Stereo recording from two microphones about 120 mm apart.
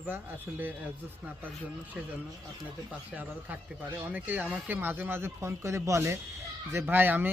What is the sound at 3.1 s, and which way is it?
Speech, 5° right (ahead or behind).